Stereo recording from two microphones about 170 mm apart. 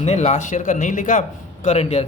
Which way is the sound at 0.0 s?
40° left (ahead or behind).